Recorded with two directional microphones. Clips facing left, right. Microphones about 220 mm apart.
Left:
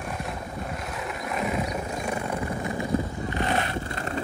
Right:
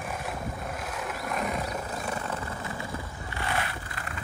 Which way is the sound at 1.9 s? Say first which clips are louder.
Left 4 dB; 10° left (ahead or behind).